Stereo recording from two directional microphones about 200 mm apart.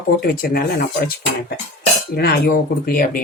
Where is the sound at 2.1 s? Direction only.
55° left (ahead or behind).